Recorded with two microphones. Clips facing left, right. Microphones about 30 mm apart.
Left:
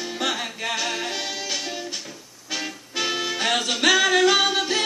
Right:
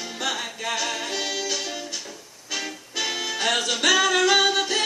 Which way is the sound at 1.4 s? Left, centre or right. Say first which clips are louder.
Even; left.